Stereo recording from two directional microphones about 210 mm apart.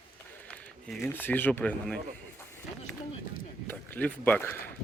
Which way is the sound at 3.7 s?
10° left (ahead or behind).